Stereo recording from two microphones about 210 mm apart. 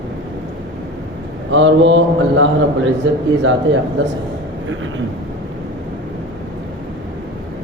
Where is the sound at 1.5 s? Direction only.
65° right (ahead or behind).